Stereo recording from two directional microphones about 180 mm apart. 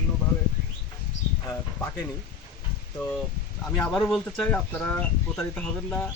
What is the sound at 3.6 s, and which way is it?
Speech, centre (ahead or behind).